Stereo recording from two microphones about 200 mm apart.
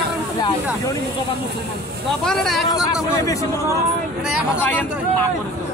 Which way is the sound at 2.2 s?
Centre (ahead or behind).